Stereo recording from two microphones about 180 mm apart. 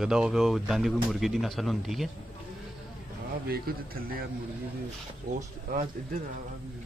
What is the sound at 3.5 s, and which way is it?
Speech, 55° right (ahead or behind).